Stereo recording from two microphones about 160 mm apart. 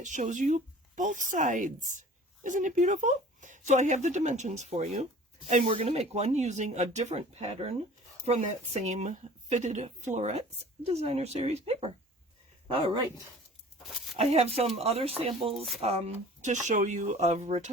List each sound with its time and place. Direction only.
0.0 s speech: 50° right (ahead or behind); by 13.0 s 35° right (ahead or behind)
14.2 s speech: 40° right (ahead or behind)
15.5 s speech: centre (ahead or behind)
15.8 s speech: 40° right (ahead or behind)